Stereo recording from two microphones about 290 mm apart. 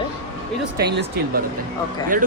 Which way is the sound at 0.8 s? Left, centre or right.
Right.